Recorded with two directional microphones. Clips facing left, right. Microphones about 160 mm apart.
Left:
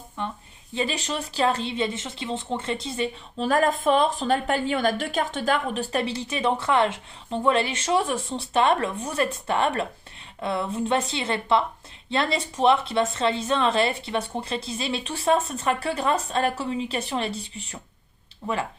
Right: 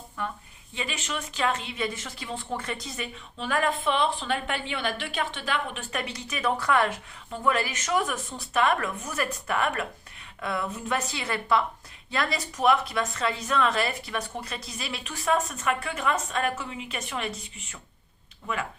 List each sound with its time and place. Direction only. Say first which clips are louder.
0.2 s speech: left 2 dB; 25° left (ahead or behind)